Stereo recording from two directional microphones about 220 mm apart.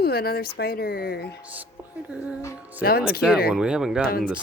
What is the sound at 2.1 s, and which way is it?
Speech, 5° right (ahead or behind).